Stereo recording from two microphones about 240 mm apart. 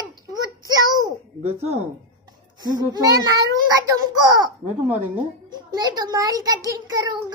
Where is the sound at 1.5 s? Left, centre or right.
Right.